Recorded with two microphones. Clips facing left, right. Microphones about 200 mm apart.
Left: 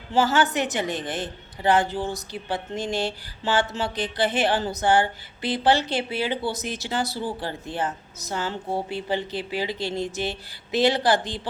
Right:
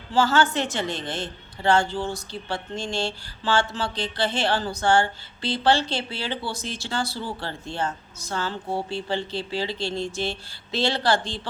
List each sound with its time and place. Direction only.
0.1 s a woman's voice: 20° left (ahead or behind)